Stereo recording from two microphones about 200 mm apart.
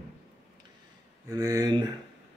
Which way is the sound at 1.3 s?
20° right (ahead or behind).